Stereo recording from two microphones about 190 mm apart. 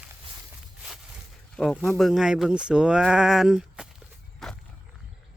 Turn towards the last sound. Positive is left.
turn(degrees=0)  # may be behind; listen again after turning